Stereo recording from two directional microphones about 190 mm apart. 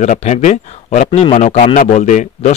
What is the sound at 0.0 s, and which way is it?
Speech, 40° left (ahead or behind).